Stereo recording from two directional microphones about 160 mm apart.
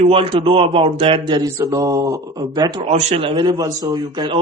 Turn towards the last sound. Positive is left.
turn(degrees=-30)  # may be behind; listen again after turning